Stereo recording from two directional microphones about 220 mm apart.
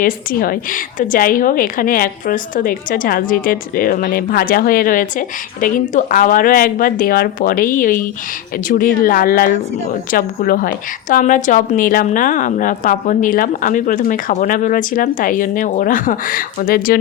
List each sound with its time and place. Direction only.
0.0 s a woman's voice: 40° left (ahead or behind)